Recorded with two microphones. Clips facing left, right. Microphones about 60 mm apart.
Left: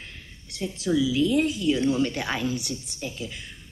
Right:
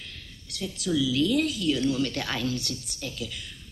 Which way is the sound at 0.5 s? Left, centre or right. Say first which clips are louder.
Left 3 dB; left.